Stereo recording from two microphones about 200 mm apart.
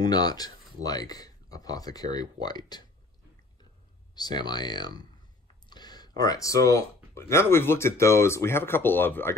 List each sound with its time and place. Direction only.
0.0 s speech: 20° left (ahead or behind)
4.1 s speech: 20° left (ahead or behind)